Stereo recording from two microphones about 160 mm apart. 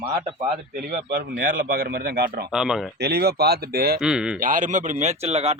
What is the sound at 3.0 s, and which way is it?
Speech, 90° right.